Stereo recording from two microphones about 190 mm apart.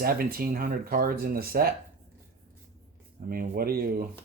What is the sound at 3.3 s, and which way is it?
Speech, 50° right (ahead or behind).